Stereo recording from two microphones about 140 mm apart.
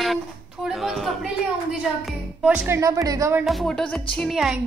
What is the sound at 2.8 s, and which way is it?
Speech, 25° right (ahead or behind).